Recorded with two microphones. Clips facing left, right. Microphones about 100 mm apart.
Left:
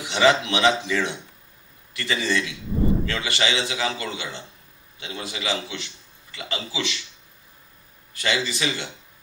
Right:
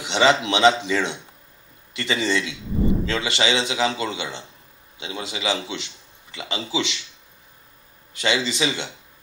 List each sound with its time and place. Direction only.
0.0 s a man's voice: 20° right (ahead or behind)
8.1 s a man's voice: 20° right (ahead or behind)